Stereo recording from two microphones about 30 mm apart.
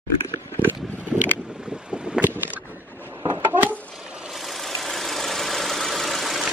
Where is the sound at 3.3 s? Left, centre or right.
Right.